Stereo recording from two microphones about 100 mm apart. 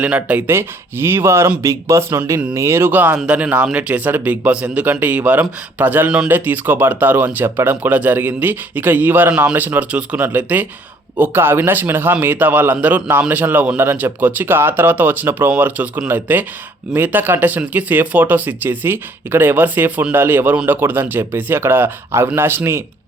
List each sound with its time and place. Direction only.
0.0 s speech: 15° right (ahead or behind)